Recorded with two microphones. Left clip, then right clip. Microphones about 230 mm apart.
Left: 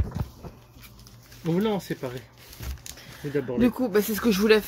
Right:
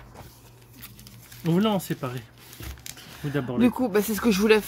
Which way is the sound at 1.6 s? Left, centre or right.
Right.